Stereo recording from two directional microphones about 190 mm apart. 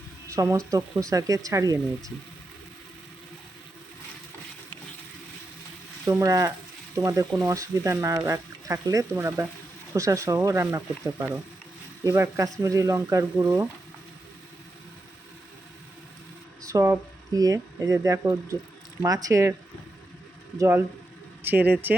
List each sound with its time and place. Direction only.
0.3 s speech: 15° right (ahead or behind)
6.1 s speech: 15° right (ahead or behind)
16.6 s speech: 15° right (ahead or behind)
20.6 s speech: 10° right (ahead or behind)